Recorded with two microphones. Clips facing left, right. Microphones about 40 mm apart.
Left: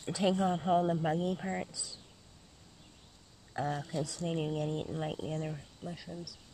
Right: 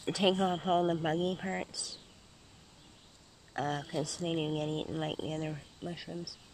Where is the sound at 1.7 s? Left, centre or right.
Right.